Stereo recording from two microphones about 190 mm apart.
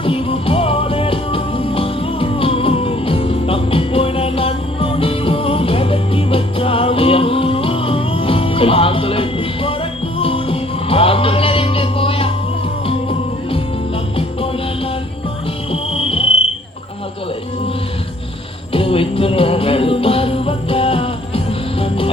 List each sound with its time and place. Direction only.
0.0 s music: 30° left (ahead or behind)
15.7 s music: 30° left (ahead or behind)
18.7 s music: 30° left (ahead or behind)